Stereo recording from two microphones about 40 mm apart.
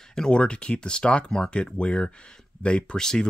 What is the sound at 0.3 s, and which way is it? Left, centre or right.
Speech, left.